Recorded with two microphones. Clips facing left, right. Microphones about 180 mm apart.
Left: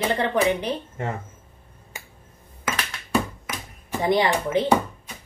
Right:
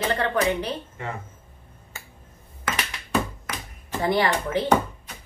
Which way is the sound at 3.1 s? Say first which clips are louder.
Left 2 dB; 10° left (ahead or behind).